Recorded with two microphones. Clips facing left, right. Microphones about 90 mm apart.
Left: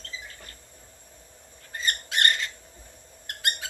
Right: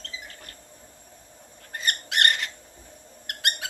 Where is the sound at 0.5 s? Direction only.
65° right (ahead or behind).